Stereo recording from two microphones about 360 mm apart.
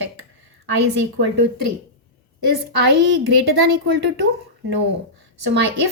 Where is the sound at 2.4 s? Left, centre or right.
Right.